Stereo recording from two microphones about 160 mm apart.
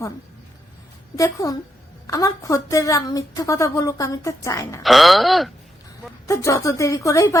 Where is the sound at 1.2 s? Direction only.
20° left (ahead or behind).